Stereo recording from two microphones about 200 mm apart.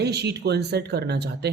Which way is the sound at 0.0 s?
55° right (ahead or behind).